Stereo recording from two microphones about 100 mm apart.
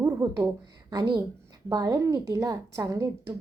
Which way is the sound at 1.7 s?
40° right (ahead or behind).